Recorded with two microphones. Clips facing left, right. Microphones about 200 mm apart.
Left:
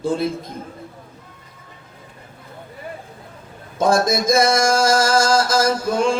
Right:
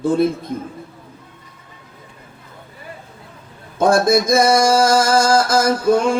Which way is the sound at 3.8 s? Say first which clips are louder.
Right 3 dB; 55° right (ahead or behind).